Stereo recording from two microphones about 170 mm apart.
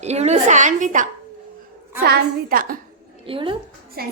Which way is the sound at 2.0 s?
65° right (ahead or behind).